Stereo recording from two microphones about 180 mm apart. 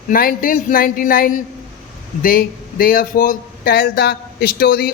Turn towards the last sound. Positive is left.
turn(degrees=60)  # may be behind; listen again after turning